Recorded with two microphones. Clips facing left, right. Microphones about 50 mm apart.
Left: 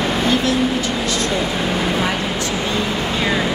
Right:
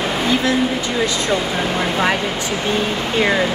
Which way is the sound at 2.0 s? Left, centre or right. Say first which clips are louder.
Right 2 dB; right.